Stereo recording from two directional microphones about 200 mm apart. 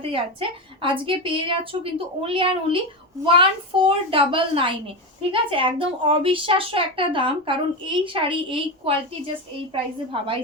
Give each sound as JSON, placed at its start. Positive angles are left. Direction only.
{"t": 0.0, "sound": "speech", "side_deg": -25}